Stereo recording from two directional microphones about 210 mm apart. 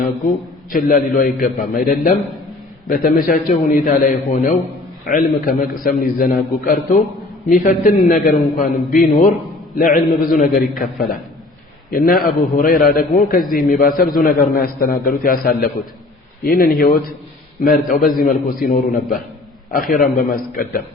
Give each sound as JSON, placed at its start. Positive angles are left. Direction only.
{"t": 0.7, "sound": "a man's voice", "side_deg": 40}